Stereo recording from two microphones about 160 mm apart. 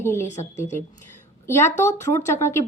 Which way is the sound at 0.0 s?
15° left (ahead or behind).